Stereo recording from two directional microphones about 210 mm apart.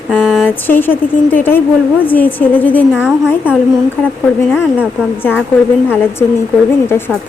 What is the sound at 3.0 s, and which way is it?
Speech, 5° right (ahead or behind).